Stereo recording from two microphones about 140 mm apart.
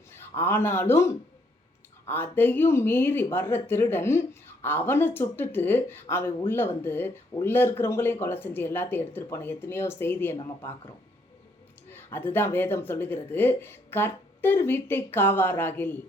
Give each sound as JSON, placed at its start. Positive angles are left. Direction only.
{"t": 0.1, "sound": "speech", "side_deg": 15}